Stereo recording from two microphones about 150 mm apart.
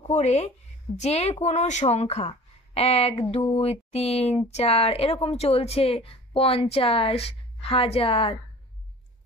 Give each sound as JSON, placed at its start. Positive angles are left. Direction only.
{"t": 0.0, "sound": "a woman's voice", "side_deg": 50}